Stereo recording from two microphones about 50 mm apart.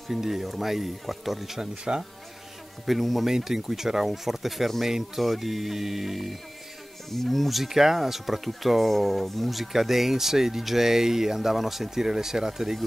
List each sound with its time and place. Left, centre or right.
0.1 s speech: centre
1.9 s speech: centre
2.9 s speech: centre